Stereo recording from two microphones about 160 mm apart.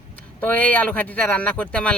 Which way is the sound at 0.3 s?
10° left (ahead or behind).